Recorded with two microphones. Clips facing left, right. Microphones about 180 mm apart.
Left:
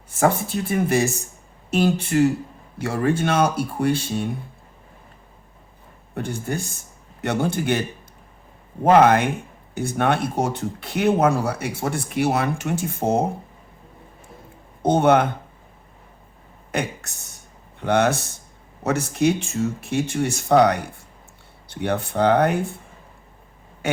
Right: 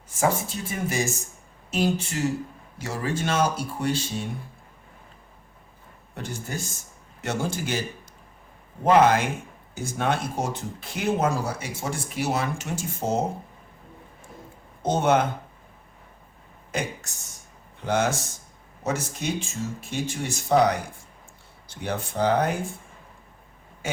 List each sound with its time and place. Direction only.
0.2 s speech: 60° left (ahead or behind)
6.1 s speech: 55° left (ahead or behind)
14.8 s speech: 60° left (ahead or behind)
16.7 s speech: 65° left (ahead or behind)
23.8 s speech: 65° left (ahead or behind)